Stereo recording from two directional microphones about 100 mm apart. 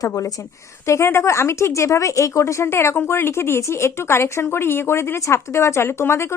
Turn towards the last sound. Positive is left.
turn(degrees=25)  # may be behind; listen again after turning